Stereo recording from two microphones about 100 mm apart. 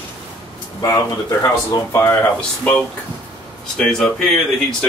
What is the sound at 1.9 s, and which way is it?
Speech, 20° left (ahead or behind).